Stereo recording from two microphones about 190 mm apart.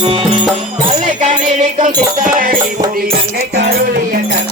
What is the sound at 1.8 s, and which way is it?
Music, 40° right (ahead or behind).